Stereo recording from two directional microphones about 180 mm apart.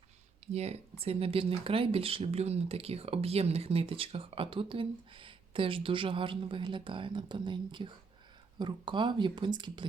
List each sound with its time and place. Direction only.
0.5 s speech: 35° right (ahead or behind)